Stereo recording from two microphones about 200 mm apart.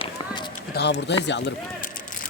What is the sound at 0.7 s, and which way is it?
Speech, 60° left (ahead or behind).